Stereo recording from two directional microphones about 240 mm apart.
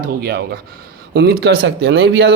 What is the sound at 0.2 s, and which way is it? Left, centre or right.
Speech, right.